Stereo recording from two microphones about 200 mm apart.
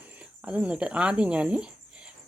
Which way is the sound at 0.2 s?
5° right (ahead or behind).